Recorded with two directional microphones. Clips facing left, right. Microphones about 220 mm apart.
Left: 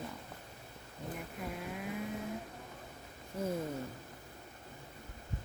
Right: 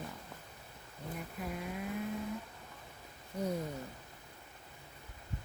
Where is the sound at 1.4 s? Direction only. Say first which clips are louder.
Right 1 dB; centre (ahead or behind).